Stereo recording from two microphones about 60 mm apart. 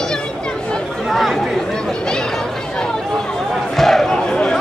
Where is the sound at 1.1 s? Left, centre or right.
Centre.